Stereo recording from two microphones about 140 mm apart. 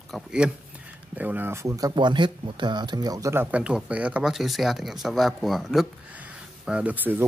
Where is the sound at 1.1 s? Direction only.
15° right (ahead or behind).